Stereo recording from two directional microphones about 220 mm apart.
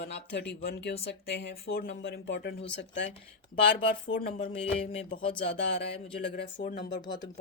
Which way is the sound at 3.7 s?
40° left (ahead or behind).